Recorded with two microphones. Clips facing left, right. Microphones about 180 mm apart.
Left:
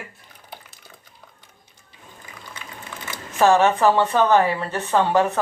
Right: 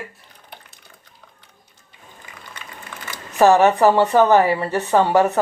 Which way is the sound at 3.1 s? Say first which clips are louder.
Right 3 dB; 15° right (ahead or behind).